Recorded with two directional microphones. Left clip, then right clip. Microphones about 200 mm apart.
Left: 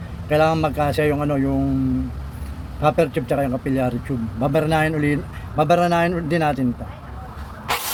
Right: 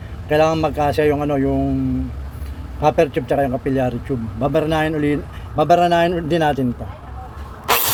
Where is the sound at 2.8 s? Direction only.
10° right (ahead or behind).